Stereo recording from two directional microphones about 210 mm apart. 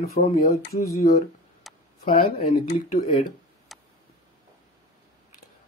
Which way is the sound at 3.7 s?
Centre (ahead or behind).